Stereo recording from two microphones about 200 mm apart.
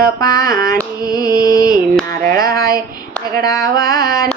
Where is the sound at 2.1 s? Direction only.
50° right (ahead or behind).